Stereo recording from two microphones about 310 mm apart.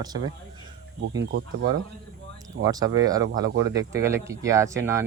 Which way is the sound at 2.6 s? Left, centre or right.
Centre.